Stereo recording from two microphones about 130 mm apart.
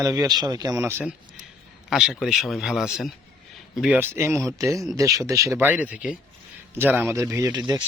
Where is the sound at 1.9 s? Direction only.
5° right (ahead or behind); by 7.8 s 30° right (ahead or behind).